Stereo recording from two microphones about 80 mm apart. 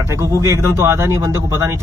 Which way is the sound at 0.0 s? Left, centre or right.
Right.